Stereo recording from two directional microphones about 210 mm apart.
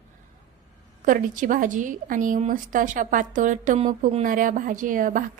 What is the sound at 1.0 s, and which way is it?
A woman's voice, 40° right (ahead or behind).